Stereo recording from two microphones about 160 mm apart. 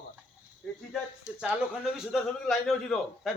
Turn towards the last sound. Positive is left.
turn(degrees=0)  # may be behind; listen again after turning